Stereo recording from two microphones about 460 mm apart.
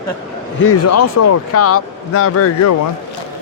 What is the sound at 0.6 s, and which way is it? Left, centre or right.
Speech, left.